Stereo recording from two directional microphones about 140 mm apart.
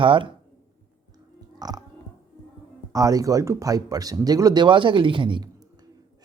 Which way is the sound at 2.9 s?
25° right (ahead or behind).